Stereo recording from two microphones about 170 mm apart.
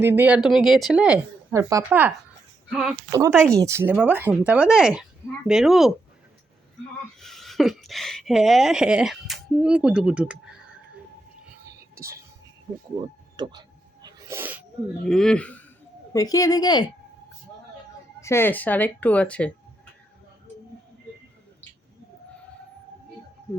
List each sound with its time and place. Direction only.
0.0 s speech: 10° right (ahead or behind)
3.1 s speech: 15° right (ahead or behind)
7.2 s speech: centre (ahead or behind)
11.8 s whispering: 15° right (ahead or behind)
13.0 s a sound: 25° right (ahead or behind)
15.0 s speech: 5° left (ahead or behind)
16.1 s a woman's voice: 20° left (ahead or behind)
18.2 s speech: 15° left (ahead or behind)